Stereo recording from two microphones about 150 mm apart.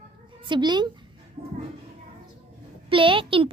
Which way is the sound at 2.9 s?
35° right (ahead or behind).